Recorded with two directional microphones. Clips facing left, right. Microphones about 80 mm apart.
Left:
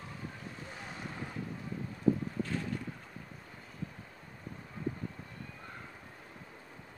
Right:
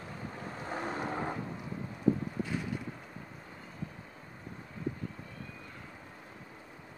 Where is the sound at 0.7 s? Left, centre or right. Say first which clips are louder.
Right 12 dB; right.